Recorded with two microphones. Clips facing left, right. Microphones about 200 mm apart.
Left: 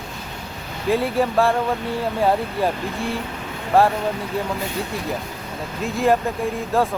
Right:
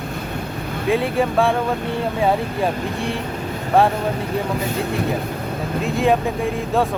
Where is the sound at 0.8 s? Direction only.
Centre (ahead or behind).